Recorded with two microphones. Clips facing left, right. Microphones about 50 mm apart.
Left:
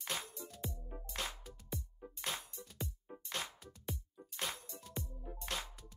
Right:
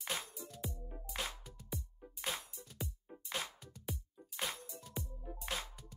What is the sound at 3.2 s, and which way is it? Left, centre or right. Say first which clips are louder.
Music: right 1 dB; centre.